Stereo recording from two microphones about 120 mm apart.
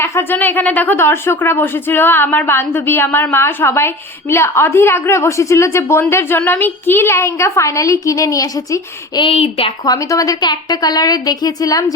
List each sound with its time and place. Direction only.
0.0 s speech: 20° left (ahead or behind)
9.2 s a woman's voice: 55° left (ahead or behind)
9.8 s a woman's voice: 30° left (ahead or behind)